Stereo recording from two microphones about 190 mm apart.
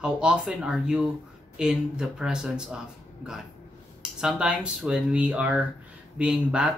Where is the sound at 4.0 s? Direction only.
5° right (ahead or behind).